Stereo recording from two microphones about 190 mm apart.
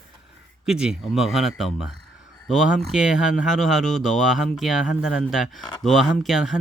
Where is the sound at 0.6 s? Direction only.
5° right (ahead or behind).